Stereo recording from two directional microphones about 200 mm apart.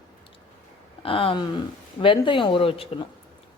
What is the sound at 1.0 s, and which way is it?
Speech, 25° left (ahead or behind).